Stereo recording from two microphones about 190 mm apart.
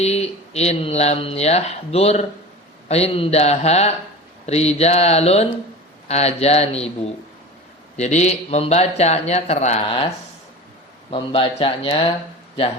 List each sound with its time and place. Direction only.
0.0 s speech: 35° left (ahead or behind)
7.9 s speech: 35° left (ahead or behind)
11.1 s speech: 30° left (ahead or behind)